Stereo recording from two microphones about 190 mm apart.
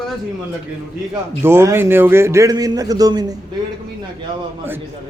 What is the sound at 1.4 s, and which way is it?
A man's voice, 15° right (ahead or behind).